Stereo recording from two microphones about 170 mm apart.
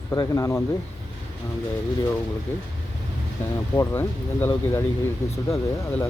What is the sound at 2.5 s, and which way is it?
Speech, 10° left (ahead or behind).